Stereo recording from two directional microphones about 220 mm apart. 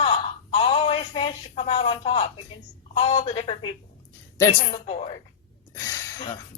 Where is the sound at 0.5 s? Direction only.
25° left (ahead or behind).